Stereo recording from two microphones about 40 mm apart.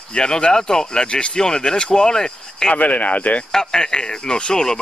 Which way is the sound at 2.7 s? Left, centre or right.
Left.